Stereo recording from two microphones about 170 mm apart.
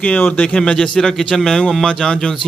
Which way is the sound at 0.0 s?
10° left (ahead or behind).